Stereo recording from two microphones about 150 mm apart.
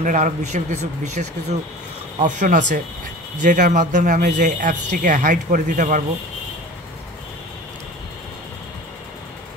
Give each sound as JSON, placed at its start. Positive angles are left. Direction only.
{"t": 0.0, "sound": "speech", "side_deg": -55}